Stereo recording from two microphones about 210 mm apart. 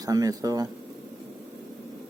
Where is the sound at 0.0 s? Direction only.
15° right (ahead or behind).